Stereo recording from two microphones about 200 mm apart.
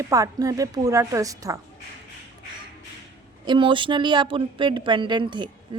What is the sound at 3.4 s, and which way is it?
A woman's voice, 25° right (ahead or behind).